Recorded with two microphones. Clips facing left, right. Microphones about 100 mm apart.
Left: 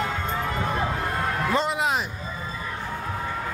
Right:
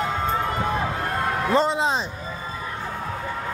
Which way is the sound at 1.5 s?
30° right (ahead or behind).